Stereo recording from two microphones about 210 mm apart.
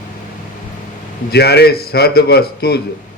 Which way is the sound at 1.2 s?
50° left (ahead or behind).